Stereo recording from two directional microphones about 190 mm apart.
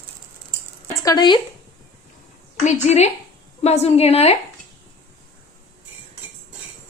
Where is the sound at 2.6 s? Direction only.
35° left (ahead or behind).